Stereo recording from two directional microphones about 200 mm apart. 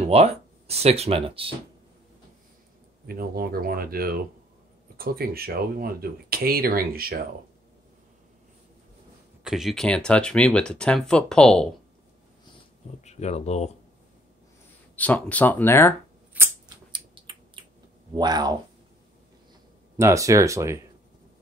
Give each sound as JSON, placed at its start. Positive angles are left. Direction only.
{"t": 0.0, "sound": "speech", "side_deg": -30}
{"t": 3.1, "sound": "speech", "side_deg": -50}
{"t": 9.4, "sound": "speech", "side_deg": 0}
{"t": 13.0, "sound": "speech", "side_deg": 35}
{"t": 15.0, "sound": "speech", "side_deg": 5}
{"t": 16.3, "sound": "scissors", "side_deg": -10}
{"t": 16.9, "sound": "a sound", "side_deg": -25}
{"t": 18.1, "sound": "speech", "side_deg": -20}
{"t": 20.0, "sound": "speech", "side_deg": -15}